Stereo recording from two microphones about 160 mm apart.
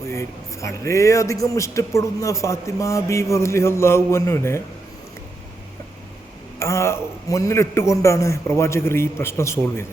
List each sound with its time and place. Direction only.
0.1 s a man's voice: 15° left (ahead or behind)
6.6 s a man's voice: 15° left (ahead or behind)